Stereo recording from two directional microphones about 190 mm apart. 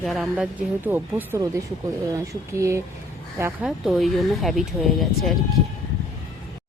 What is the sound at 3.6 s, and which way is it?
Speech, centre (ahead or behind).